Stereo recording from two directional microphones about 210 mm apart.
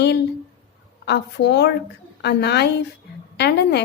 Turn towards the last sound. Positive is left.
turn(degrees=50)  # may be behind; listen again after turning